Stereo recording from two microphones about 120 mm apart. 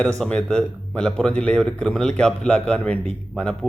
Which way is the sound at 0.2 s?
5° left (ahead or behind).